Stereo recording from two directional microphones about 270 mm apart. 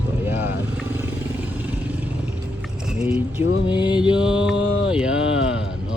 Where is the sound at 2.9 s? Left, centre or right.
Centre.